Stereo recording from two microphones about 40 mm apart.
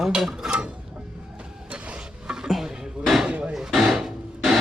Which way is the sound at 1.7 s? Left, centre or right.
Right.